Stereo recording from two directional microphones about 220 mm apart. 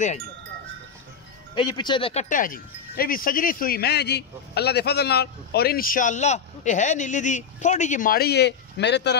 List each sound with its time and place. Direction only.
1.5 s speech: 20° left (ahead or behind)
2.2 s wind chime: 40° left (ahead or behind)